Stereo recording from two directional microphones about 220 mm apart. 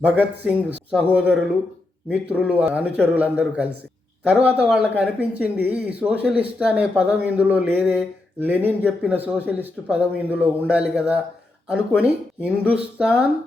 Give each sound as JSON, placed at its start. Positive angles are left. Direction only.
{"t": 0.0, "sound": "speech", "side_deg": -5}